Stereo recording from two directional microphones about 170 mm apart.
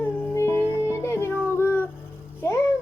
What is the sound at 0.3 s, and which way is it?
Music, 15° left (ahead or behind).